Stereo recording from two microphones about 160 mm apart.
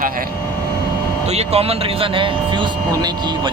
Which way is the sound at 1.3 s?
40° right (ahead or behind).